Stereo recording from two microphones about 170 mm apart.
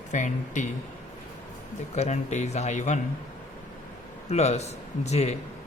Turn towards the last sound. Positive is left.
turn(degrees=40)  # may be behind; listen again after turning